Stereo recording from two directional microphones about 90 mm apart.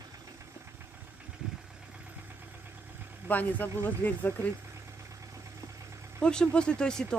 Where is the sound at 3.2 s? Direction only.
20° left (ahead or behind).